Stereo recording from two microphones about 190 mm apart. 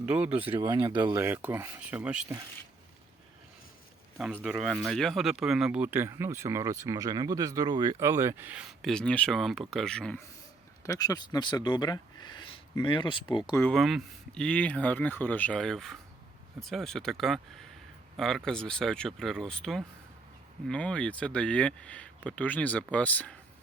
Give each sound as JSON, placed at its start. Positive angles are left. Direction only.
{"t": 0.0, "sound": "speech", "side_deg": -5}
{"t": 0.6, "sound": "speech", "side_deg": -20}
{"t": 1.2, "sound": "speech", "side_deg": -10}
{"t": 4.4, "sound": "speech", "side_deg": -5}
{"t": 10.8, "sound": "speech", "side_deg": 20}
{"t": 13.6, "sound": "speech", "side_deg": 5}